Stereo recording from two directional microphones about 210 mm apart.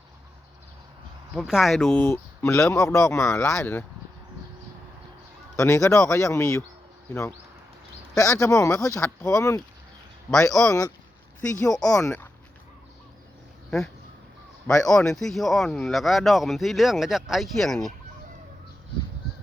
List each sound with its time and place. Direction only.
1.4 s speech: centre (ahead or behind)
5.5 s speech: 15° left (ahead or behind)
10.3 s speech: centre (ahead or behind)
10.7 s speech: 15° left (ahead or behind)
13.7 s speech: centre (ahead or behind)
14.7 s speech: 15° left (ahead or behind)
14.9 s speech: 5° left (ahead or behind)